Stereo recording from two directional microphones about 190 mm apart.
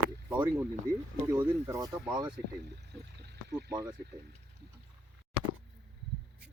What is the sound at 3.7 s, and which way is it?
Speech, 15° right (ahead or behind).